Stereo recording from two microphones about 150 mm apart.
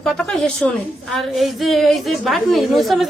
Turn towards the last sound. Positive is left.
turn(degrees=0)  # may be behind; listen again after turning